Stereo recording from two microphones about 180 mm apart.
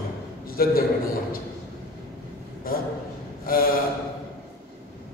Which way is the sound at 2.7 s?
55° left (ahead or behind).